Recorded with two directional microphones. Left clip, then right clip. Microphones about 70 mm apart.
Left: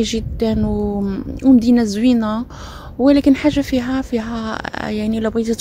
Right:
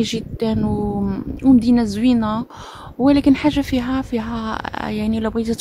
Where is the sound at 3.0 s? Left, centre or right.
Right.